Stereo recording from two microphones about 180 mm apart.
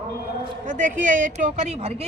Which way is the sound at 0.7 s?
45° right (ahead or behind).